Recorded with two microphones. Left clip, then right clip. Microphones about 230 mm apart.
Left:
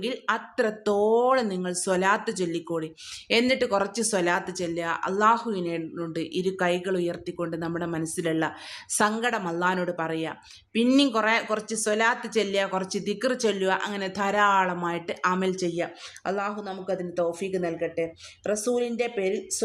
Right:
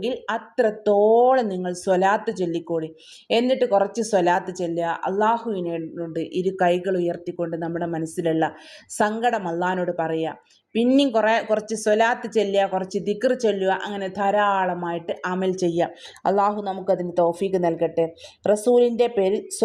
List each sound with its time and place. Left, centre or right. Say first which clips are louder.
0.0 s speech: right 2 dB; centre